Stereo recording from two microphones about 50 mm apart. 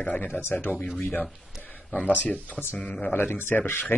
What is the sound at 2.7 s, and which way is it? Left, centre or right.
Speech, left.